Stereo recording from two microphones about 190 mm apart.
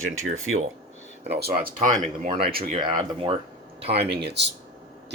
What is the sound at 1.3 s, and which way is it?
Speech, 55° right (ahead or behind).